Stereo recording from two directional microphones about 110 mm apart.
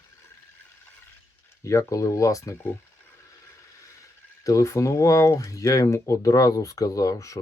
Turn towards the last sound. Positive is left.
turn(degrees=30)  # may be behind; listen again after turning